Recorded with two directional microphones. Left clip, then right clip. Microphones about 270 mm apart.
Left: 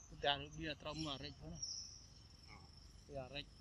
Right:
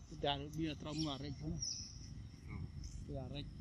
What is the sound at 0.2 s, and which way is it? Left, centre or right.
Speech, centre.